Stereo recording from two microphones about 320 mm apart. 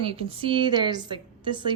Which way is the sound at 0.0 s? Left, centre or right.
Centre.